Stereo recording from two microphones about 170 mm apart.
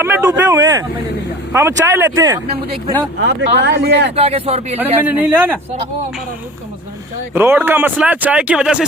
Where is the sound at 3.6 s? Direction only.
75° right (ahead or behind).